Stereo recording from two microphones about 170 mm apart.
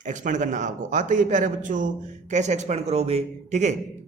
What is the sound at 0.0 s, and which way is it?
A man's voice, 45° right (ahead or behind).